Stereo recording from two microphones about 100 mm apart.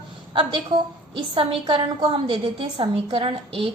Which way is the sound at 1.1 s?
60° right (ahead or behind).